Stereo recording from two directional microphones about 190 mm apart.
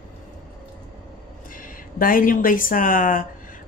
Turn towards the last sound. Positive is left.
turn(degrees=45)  # may be behind; listen again after turning